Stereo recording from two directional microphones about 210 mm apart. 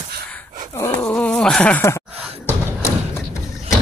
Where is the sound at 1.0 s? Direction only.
5° left (ahead or behind).